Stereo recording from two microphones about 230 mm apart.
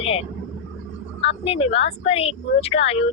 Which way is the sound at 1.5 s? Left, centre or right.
Left.